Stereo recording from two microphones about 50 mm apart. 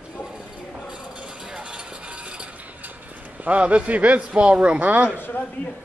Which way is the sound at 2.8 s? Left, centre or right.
Right.